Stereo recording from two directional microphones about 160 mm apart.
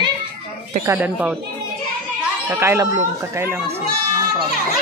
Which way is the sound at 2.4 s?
15° right (ahead or behind).